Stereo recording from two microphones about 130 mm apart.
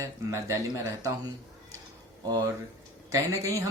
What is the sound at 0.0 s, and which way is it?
Speech, 25° right (ahead or behind).